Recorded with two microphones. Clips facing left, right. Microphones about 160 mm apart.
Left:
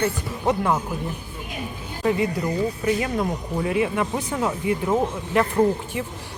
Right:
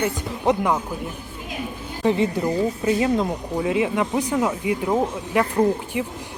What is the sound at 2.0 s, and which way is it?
A woman's voice, 25° right (ahead or behind).